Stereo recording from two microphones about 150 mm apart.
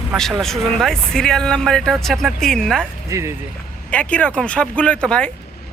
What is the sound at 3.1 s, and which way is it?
Speech, 20° right (ahead or behind).